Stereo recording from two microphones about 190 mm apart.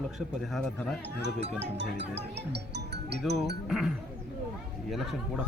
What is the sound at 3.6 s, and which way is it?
A man's voice, 5° right (ahead or behind).